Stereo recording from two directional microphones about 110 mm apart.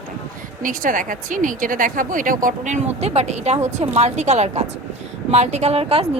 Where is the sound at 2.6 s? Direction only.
90° right.